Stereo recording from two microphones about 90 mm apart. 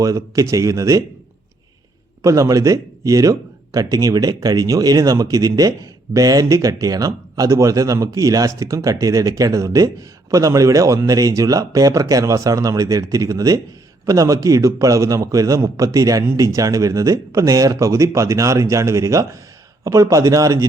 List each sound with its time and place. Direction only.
0.0 s speech: 40° right (ahead or behind)
2.2 s speech: 35° right (ahead or behind)